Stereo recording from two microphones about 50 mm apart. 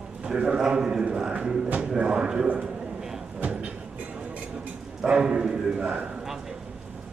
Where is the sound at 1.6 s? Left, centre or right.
Right.